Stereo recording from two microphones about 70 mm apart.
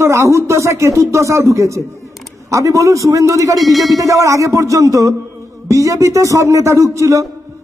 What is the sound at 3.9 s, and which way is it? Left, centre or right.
A man's voice, right.